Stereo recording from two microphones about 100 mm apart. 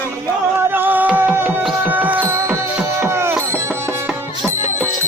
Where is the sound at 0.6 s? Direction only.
20° right (ahead or behind).